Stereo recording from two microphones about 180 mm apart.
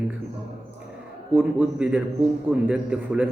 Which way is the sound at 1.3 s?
10° right (ahead or behind).